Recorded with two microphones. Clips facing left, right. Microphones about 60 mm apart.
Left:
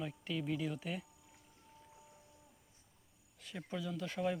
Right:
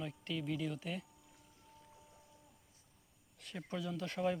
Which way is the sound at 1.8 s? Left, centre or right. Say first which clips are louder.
Left 3 dB; centre.